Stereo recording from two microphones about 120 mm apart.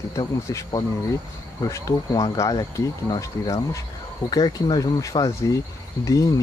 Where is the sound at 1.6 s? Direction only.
30° left (ahead or behind).